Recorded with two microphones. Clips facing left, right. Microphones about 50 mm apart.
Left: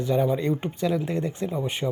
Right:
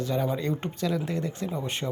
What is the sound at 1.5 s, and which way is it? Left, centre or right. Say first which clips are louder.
Speech: left 3 dB; centre.